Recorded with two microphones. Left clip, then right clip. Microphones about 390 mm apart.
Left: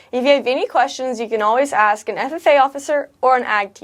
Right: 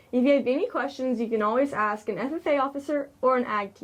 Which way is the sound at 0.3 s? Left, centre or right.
Left.